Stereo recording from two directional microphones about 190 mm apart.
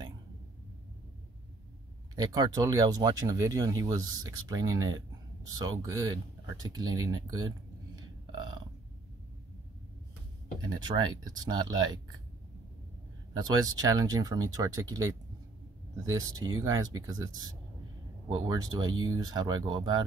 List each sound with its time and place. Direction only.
2.1 s speech: 20° right (ahead or behind)
6.9 s burping: 20° right (ahead or behind)
10.6 s speech: 20° right (ahead or behind)
13.6 s speech: 20° right (ahead or behind)